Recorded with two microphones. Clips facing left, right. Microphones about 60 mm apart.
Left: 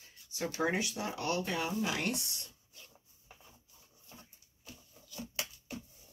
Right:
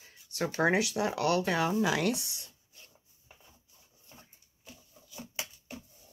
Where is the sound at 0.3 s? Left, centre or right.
Right.